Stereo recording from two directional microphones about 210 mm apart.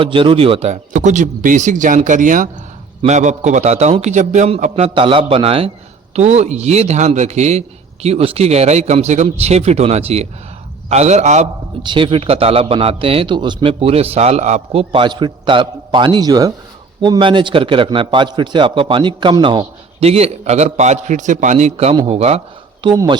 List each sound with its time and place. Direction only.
0.0 s a man's voice: 25° right (ahead or behind)
11.8 s a man's voice: 20° right (ahead or behind)